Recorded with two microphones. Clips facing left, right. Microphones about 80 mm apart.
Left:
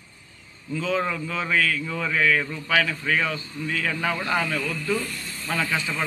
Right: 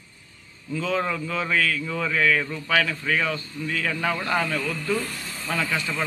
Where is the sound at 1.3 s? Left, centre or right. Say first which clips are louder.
Left 1 dB; left.